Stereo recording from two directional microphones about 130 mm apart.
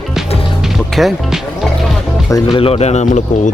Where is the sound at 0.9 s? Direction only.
Centre (ahead or behind).